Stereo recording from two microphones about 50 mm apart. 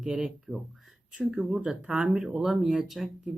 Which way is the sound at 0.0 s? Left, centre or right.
Centre.